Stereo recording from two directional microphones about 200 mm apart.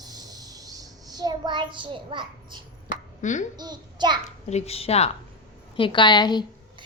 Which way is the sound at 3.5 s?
20° right (ahead or behind).